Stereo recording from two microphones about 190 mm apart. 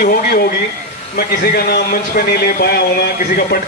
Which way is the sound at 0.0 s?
50° left (ahead or behind).